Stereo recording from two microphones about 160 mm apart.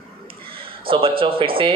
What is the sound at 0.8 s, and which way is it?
Speech, 35° right (ahead or behind).